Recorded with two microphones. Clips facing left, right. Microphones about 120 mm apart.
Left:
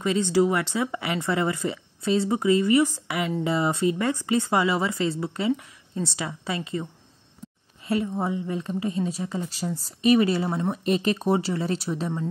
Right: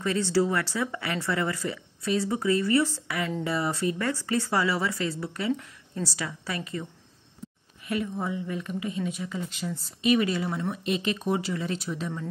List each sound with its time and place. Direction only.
0.0 s speech: 20° left (ahead or behind)
5.5 s speech: 10° left (ahead or behind)
6.0 s a woman's voice: 25° left (ahead or behind)